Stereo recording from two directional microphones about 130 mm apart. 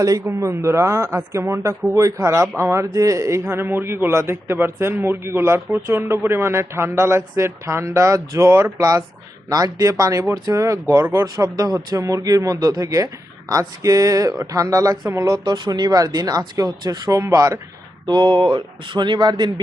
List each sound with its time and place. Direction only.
0.0 s a man's voice: 25° right (ahead or behind)
18.0 s speech: 35° right (ahead or behind)